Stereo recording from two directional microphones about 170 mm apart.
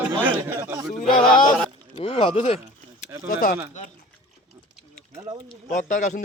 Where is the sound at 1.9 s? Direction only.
35° left (ahead or behind).